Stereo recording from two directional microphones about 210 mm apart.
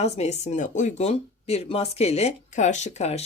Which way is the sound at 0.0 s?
30° left (ahead or behind).